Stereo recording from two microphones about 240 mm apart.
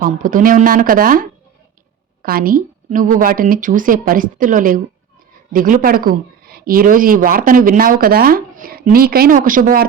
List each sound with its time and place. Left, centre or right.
0.0 s speech: right